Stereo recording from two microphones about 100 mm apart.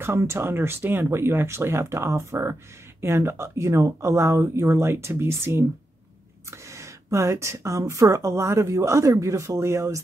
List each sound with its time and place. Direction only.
0.0 s speech: 25° right (ahead or behind)
6.7 s speech: 30° right (ahead or behind)